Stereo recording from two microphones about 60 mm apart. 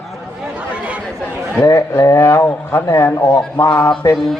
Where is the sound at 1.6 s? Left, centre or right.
Left.